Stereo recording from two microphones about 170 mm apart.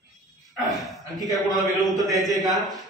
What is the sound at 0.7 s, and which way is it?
Speech, centre (ahead or behind).